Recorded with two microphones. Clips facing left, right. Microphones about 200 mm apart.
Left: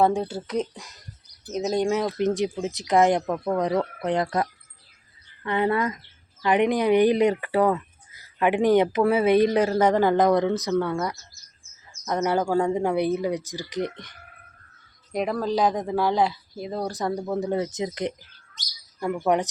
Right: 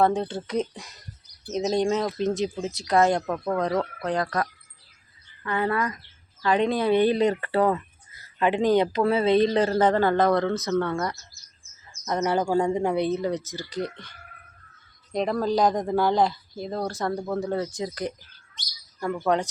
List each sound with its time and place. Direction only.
0.0 s speech: 10° left (ahead or behind)
3.2 s a woman's voice: 5° left (ahead or behind)
12.2 s speech: 10° left (ahead or behind)
15.1 s speech: 5° left (ahead or behind)